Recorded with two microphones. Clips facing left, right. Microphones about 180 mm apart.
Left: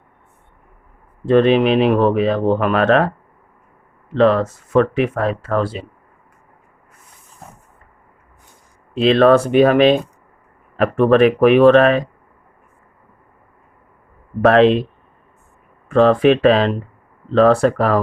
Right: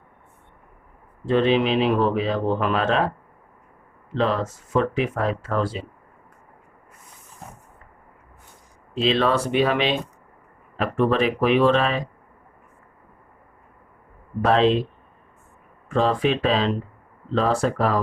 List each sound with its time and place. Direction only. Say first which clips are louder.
1.3 s speech: left 6 dB; 55° left (ahead or behind)
4.1 s speech: left 9 dB; 60° left (ahead or behind)
9.0 s speech: left 9 dB; 55° left (ahead or behind)
14.4 s speech: left 7 dB; 65° left (ahead or behind)
15.9 s speech: left 9 dB; 65° left (ahead or behind)